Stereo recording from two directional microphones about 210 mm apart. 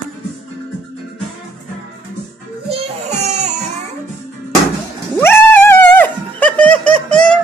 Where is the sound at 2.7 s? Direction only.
30° right (ahead or behind).